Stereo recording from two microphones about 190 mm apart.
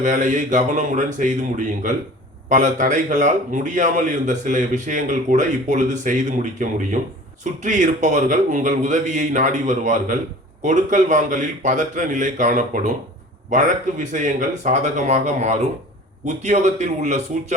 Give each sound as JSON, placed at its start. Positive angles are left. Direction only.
{"t": 0.0, "sound": "a man's voice", "side_deg": -40}